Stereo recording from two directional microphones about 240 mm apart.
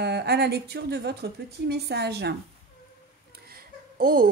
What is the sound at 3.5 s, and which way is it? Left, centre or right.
Babbling, right.